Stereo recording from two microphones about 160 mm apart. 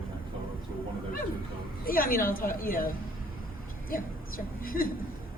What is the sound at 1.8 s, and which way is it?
A woman's voice, 65° left (ahead or behind).